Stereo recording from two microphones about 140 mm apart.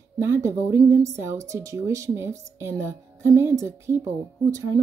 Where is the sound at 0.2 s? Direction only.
20° right (ahead or behind).